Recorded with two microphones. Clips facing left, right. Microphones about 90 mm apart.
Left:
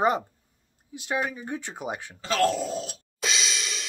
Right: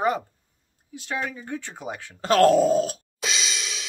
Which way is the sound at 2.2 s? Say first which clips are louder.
Right 8 dB; 50° right (ahead or behind).